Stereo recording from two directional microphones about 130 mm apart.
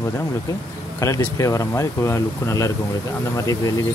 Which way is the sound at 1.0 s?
25° left (ahead or behind).